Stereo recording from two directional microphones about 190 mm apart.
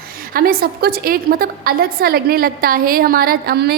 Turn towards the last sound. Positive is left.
turn(degrees=-55)  # may be behind; listen again after turning